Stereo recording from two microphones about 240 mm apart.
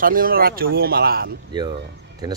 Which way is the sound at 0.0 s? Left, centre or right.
Right.